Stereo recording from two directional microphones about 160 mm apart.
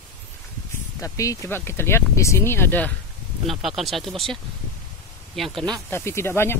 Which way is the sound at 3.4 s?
Centre (ahead or behind).